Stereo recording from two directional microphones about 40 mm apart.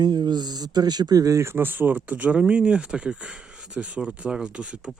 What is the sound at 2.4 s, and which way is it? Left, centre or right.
Speech, right.